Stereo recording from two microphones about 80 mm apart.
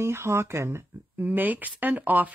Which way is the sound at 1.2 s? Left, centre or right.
Right.